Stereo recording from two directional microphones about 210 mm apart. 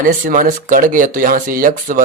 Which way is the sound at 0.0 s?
40° right (ahead or behind).